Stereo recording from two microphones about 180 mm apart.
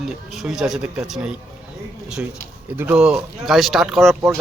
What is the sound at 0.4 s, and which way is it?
Speech, centre (ahead or behind).